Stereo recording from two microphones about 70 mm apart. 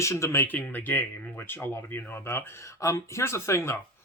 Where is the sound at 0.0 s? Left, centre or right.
Left.